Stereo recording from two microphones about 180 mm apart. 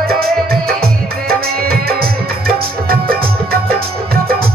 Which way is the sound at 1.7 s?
55° right (ahead or behind).